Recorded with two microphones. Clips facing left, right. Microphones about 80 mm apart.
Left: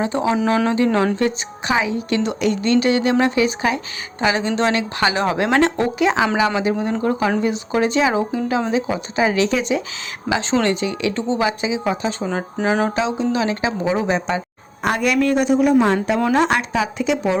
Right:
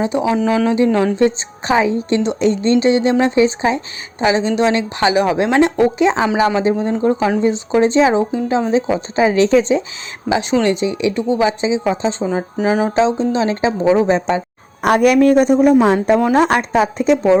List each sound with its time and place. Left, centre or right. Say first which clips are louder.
0.0 s speech: right 3 dB; centre
0.3 s speech: right 2 dB; centre
1.1 s speech: right 5 dB; right
1.8 s speech: right 4 dB; right
10.2 s speech: right 3 dB; centre
12.2 s speech: right 4 dB; centre
13.0 s speech: right 5 dB; right
14.8 s speech: right 7 dB; right
15.7 s speech: right 3 dB; centre
16.3 s speech: right 4 dB; right